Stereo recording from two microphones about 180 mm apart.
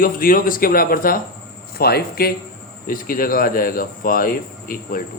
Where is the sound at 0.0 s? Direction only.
50° left (ahead or behind).